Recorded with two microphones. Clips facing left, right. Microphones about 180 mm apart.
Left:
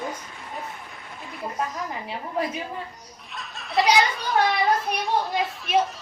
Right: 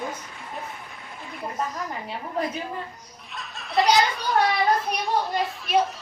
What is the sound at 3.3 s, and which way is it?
Children playing, centre (ahead or behind).